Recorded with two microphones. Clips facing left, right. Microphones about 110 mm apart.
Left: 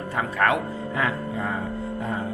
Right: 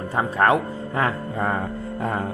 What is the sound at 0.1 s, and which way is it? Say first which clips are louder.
Speech: right 4 dB; 30° right (ahead or behind).